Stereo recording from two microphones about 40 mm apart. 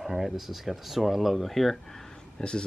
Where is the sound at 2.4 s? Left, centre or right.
Left.